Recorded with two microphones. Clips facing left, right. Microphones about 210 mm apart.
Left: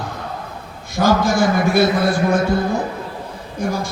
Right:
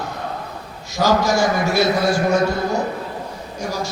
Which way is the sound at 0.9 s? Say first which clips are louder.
Left 1 dB; 55° left (ahead or behind).